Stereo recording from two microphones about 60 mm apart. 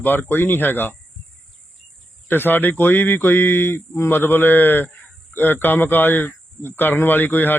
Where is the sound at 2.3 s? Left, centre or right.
Left.